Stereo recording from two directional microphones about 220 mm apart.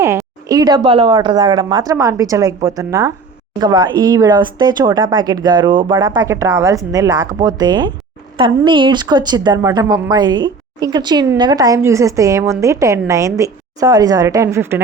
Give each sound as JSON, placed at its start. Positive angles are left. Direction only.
{"t": 0.4, "sound": "a woman's voice", "side_deg": -15}